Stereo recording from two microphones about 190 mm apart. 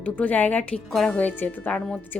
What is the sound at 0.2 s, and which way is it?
A woman's voice, 5° left (ahead or behind).